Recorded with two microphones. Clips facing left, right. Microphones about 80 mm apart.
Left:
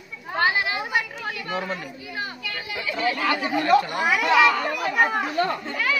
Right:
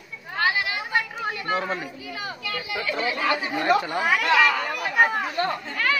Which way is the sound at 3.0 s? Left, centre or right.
Right.